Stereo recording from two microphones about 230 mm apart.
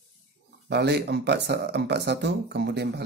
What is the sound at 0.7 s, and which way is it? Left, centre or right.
Speech, right.